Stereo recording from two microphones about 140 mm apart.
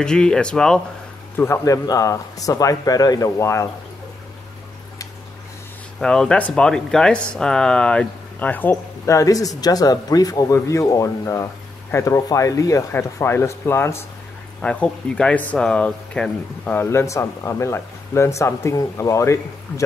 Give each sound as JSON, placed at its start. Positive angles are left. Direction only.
{"t": 0.0, "sound": "speech", "side_deg": 5}
{"t": 1.3, "sound": "speech", "side_deg": 20}
{"t": 5.9, "sound": "speech", "side_deg": 5}
{"t": 14.6, "sound": "speech", "side_deg": 5}